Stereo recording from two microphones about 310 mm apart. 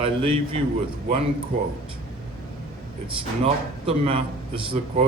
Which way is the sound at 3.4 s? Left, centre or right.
Centre.